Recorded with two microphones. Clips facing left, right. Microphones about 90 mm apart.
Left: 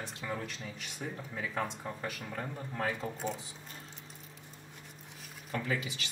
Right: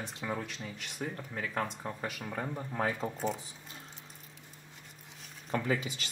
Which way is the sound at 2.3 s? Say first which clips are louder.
Right 3 dB; 25° right (ahead or behind).